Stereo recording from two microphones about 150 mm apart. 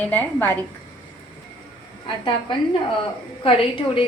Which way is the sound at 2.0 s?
35° left (ahead or behind).